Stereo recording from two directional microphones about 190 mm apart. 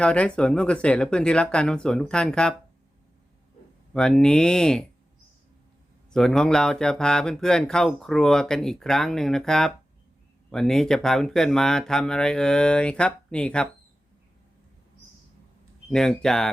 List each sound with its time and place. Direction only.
0.0 s speech: 5° left (ahead or behind)
3.9 s speech: 5° left (ahead or behind)
6.1 s speech: 5° left (ahead or behind)
15.9 s speech: 5° left (ahead or behind)